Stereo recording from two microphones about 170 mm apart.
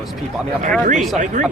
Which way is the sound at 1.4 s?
45° right (ahead or behind).